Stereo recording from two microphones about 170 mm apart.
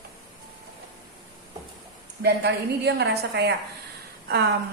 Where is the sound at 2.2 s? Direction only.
80° right.